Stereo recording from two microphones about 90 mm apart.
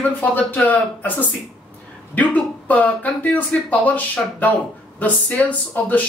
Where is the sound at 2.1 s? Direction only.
15° left (ahead or behind).